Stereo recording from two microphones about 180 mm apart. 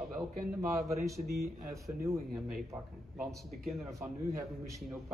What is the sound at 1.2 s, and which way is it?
Speech, 60° right (ahead or behind).